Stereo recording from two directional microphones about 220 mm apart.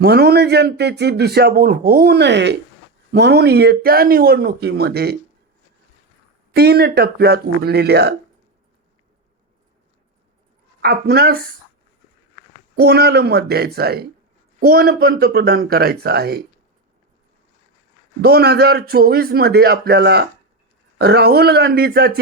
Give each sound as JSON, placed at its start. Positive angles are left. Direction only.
{"t": 0.0, "sound": "a man's voice", "side_deg": -45}
{"t": 6.5, "sound": "a man's voice", "side_deg": -45}
{"t": 10.8, "sound": "a man's voice", "side_deg": -45}
{"t": 12.7, "sound": "a man's voice", "side_deg": -45}
{"t": 18.2, "sound": "a man's voice", "side_deg": -45}